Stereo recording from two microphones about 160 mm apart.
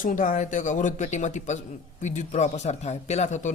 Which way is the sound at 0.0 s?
55° left (ahead or behind).